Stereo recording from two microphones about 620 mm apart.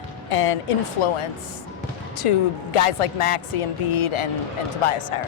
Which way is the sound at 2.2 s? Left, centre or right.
Left.